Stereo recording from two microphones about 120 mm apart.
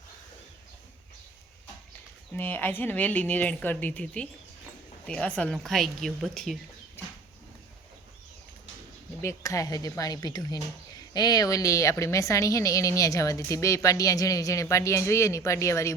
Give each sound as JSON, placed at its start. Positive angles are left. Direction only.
{"t": 2.3, "sound": "a woman's voice", "side_deg": 15}
{"t": 9.2, "sound": "speech", "side_deg": 30}